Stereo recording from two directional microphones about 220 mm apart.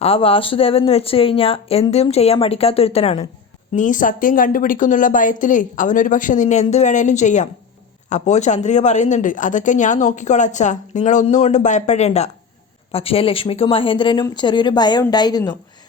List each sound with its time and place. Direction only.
0.0 s a woman's voice: 25° left (ahead or behind)